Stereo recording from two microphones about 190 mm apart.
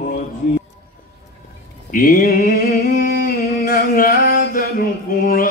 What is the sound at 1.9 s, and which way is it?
Mantra, 50° left (ahead or behind).